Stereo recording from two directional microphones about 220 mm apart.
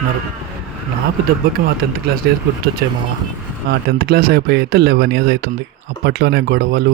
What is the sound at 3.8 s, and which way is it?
Speech, 45° right (ahead or behind).